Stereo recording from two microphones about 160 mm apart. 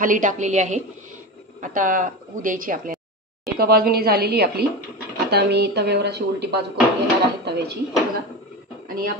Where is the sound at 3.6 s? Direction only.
75° right (ahead or behind).